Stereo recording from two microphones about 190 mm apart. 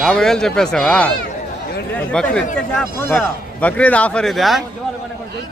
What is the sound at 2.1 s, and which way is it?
A man's voice, 5° left (ahead or behind).